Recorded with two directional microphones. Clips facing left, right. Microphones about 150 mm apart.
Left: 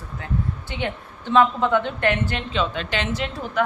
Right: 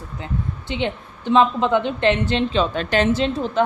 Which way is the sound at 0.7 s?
20° right (ahead or behind).